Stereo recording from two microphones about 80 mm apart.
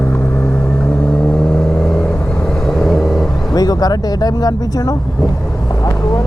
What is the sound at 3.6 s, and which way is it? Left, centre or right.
Speech, left.